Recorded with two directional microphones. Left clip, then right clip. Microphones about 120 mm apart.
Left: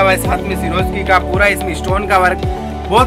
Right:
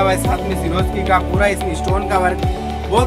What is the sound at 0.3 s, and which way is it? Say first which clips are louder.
Speech: left 3 dB; 10° left (ahead or behind).